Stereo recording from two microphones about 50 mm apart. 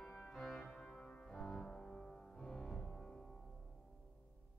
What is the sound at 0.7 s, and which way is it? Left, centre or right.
Music, left.